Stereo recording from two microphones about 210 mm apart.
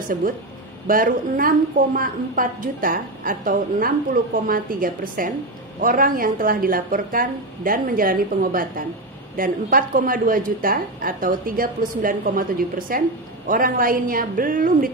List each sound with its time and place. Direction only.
0.8 s a woman's voice: 40° right (ahead or behind)